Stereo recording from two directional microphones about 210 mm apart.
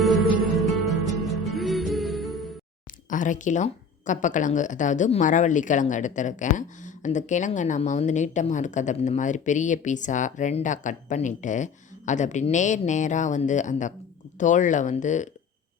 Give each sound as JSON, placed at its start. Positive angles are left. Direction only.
{"t": 0.0, "sound": "music", "side_deg": 0}
{"t": 3.1, "sound": "a woman's voice", "side_deg": 35}